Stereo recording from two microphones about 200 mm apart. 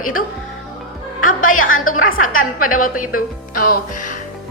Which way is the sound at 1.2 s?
40° left (ahead or behind).